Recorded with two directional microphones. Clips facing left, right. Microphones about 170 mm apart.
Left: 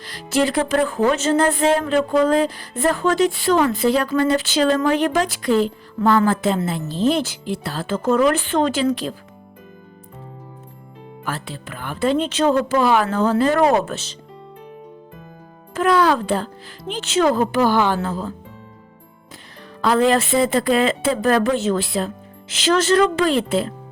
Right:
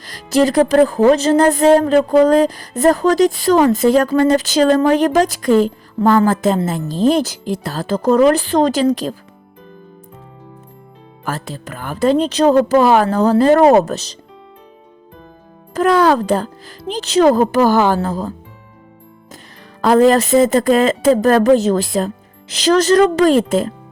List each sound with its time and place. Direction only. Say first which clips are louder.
0.0 s speech: right 5 dB; 40° right (ahead or behind)
11.3 s speech: right 4 dB; 40° right (ahead or behind)
15.7 s speech: right 4 dB; 40° right (ahead or behind)
19.8 s speech: right 6 dB; 40° right (ahead or behind)